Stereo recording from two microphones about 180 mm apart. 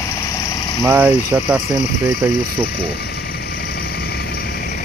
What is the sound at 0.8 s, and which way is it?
Speech, 10° right (ahead or behind).